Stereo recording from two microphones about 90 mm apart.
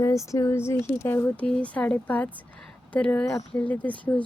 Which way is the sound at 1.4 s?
15° left (ahead or behind).